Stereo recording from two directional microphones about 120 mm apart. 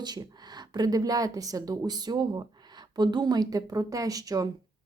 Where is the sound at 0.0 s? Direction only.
35° right (ahead or behind).